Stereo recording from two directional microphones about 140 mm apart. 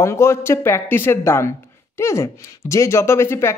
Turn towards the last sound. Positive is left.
turn(degrees=20)  # may be behind; listen again after turning